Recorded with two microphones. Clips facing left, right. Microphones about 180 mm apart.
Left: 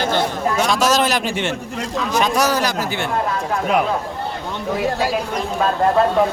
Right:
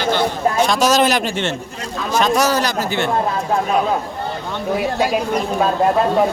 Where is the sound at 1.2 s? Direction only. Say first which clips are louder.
Right 1 dB; 10° left (ahead or behind).